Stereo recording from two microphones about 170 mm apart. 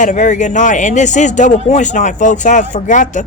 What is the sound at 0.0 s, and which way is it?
Speech, 45° left (ahead or behind).